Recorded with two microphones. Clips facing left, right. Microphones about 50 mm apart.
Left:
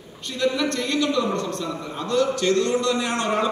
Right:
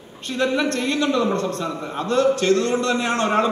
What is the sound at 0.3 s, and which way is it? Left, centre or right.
A man's voice, right.